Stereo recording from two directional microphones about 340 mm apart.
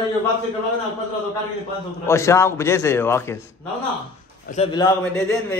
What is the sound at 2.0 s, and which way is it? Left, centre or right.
A man's voice, centre.